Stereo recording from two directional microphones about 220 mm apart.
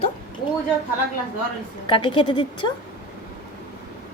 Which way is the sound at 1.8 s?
20° left (ahead or behind).